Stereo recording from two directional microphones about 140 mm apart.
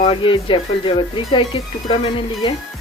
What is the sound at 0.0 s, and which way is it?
Speech, 40° left (ahead or behind).